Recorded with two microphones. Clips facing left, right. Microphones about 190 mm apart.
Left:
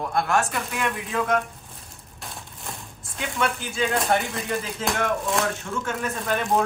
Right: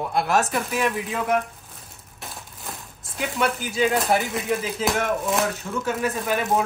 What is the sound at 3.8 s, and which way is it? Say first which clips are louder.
Speech: right 2 dB; 5° right (ahead or behind).